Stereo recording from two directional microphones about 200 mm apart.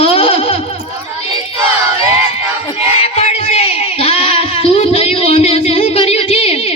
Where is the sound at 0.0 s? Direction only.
30° left (ahead or behind).